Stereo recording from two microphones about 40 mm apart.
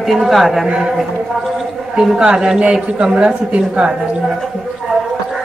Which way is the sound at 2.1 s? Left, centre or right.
Centre.